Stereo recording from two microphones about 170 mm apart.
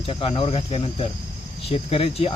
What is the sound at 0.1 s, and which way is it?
Speech, 30° left (ahead or behind).